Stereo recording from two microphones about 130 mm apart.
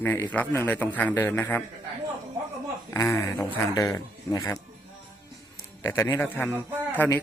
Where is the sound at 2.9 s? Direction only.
20° left (ahead or behind).